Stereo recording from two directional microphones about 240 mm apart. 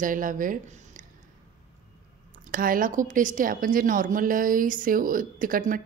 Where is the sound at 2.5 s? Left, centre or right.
Right.